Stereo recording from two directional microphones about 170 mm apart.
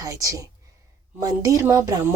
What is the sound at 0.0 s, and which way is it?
Speech, 20° right (ahead or behind).